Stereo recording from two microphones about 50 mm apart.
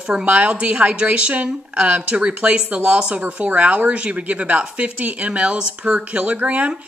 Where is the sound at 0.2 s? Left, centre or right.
Right.